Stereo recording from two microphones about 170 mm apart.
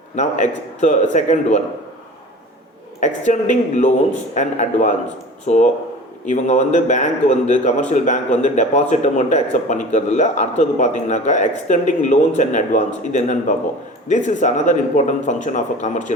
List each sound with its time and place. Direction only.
0.2 s a man's voice: 45° left (ahead or behind)
3.0 s a man's voice: 45° left (ahead or behind)